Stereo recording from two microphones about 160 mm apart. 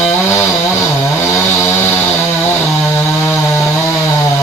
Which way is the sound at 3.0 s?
15° left (ahead or behind).